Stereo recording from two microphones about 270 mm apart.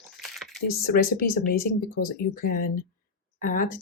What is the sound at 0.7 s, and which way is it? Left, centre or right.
Speech, left.